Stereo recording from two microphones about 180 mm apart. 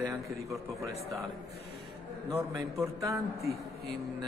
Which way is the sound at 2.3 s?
15° right (ahead or behind).